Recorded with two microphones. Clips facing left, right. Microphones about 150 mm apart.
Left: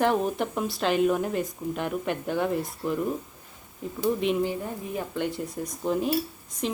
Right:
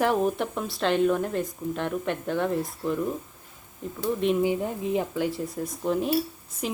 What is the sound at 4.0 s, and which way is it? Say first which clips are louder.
Speech: even; centre (ahead or behind).